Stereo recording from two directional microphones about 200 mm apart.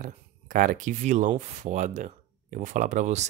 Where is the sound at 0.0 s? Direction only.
40° right (ahead or behind).